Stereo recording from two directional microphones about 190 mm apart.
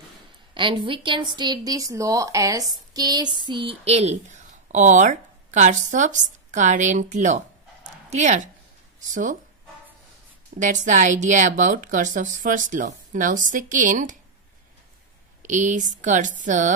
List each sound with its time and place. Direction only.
0.6 s a woman's voice: 25° right (ahead or behind); by 9.4 s 45° right (ahead or behind)
10.6 s a woman's voice: 40° right (ahead or behind)
15.4 s a woman's voice: 40° right (ahead or behind)